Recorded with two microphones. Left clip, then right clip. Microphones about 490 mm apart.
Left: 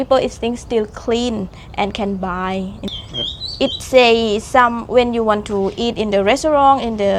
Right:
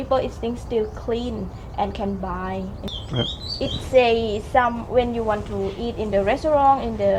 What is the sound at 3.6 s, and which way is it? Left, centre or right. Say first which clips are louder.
A woman's voice: left 6 dB; left.